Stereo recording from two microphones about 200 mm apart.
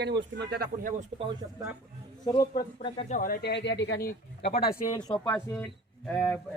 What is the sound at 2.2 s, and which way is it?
Speech, 20° left (ahead or behind).